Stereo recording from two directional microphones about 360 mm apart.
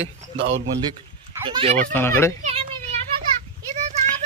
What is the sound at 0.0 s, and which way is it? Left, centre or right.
Speech, right.